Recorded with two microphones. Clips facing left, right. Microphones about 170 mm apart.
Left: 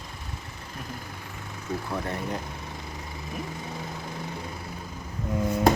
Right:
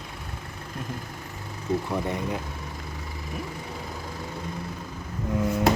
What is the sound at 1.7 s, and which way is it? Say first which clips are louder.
Speech: right 6 dB; 25° right (ahead or behind).